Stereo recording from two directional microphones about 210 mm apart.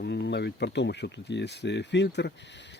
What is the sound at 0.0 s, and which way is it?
Speech, 55° left (ahead or behind).